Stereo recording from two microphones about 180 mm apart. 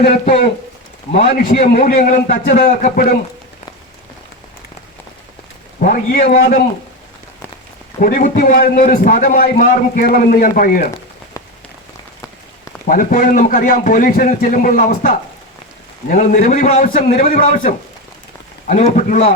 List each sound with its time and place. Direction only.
1.2 s a man's voice: 55° left (ahead or behind)
5.8 s a man's voice: 50° left (ahead or behind)
8.0 s a man's voice: 50° left (ahead or behind)
12.9 s a man's voice: 50° left (ahead or behind)